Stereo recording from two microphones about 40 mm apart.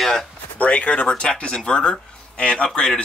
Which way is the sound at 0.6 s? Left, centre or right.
Left.